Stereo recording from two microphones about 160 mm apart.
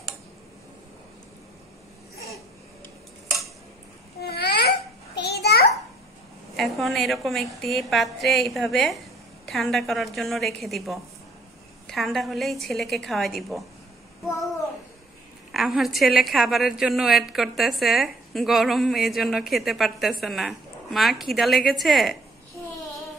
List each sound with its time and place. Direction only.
4.2 s babbling: 90° left
6.5 s a woman's voice: centre (ahead or behind)
15.5 s a woman's voice: centre (ahead or behind)